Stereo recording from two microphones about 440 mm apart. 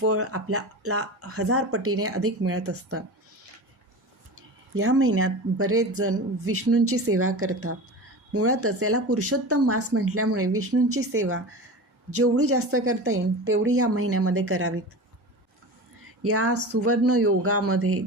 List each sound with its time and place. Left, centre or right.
0.0 s speech: right
4.7 s speech: right
16.2 s speech: right